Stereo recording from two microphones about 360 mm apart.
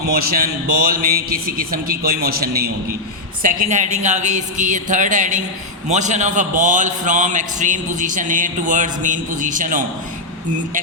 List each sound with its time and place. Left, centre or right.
0.3 s a man's voice: right